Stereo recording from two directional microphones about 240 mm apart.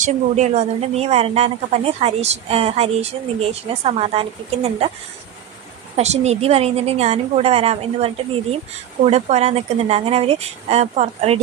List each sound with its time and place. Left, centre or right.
0.0 s a woman's voice: right
6.0 s a woman's voice: right